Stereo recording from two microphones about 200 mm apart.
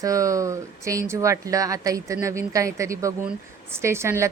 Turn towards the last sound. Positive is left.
turn(degrees=-15)  # may be behind; listen again after turning